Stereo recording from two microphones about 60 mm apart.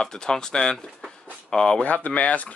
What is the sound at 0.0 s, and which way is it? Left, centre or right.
Speech, centre.